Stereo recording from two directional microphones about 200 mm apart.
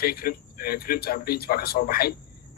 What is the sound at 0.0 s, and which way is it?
A man's voice, 50° left (ahead or behind).